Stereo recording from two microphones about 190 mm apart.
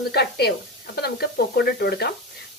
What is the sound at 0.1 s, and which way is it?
Speech, 60° left (ahead or behind).